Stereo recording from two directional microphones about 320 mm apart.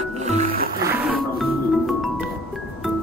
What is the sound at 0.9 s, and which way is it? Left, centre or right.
Music, centre.